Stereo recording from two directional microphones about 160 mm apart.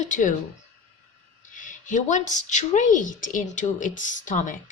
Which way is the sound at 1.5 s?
55° left (ahead or behind).